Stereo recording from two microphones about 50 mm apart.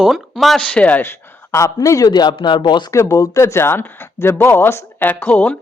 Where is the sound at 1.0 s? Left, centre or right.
Left.